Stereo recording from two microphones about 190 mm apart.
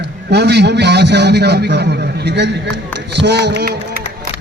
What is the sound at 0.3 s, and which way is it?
A man's voice, 60° right (ahead or behind).